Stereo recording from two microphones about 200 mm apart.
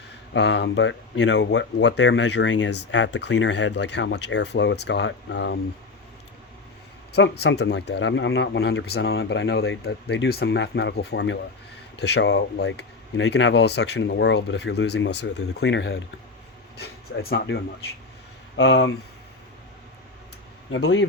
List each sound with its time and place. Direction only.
0.3 s speech: 60° left (ahead or behind)
7.1 s speech: 55° left (ahead or behind); by 16.0 s 70° left (ahead or behind)
16.7 s speech: 55° left (ahead or behind)
20.7 s speech: 65° left (ahead or behind)